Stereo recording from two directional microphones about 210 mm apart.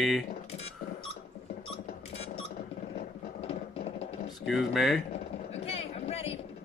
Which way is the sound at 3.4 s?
30° left (ahead or behind).